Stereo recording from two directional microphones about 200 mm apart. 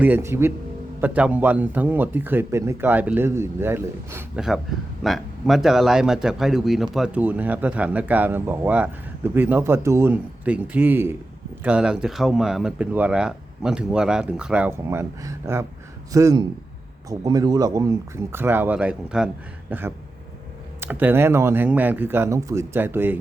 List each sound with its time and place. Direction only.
0.0 s a man's voice: 10° right (ahead or behind)